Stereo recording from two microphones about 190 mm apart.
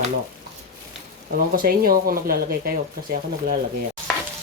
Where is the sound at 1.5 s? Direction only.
50° right (ahead or behind).